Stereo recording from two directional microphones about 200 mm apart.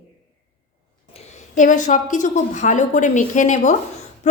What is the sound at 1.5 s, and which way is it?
A woman's voice, 40° left (ahead or behind).